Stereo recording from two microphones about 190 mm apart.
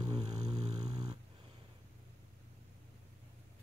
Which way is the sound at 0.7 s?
20° right (ahead or behind).